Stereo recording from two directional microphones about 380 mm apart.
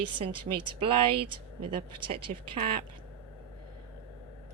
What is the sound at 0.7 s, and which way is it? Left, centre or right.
Speech, centre.